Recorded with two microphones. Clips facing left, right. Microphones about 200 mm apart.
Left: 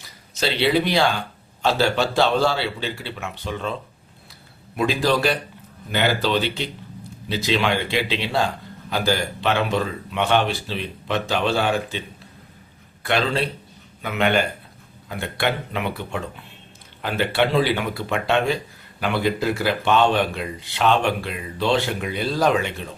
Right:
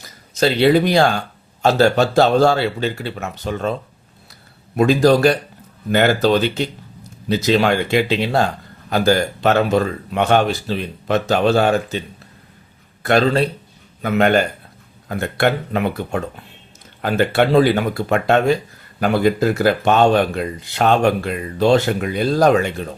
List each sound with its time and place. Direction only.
0.0 s speech: 45° right (ahead or behind)
4.8 s speech: 45° right (ahead or behind)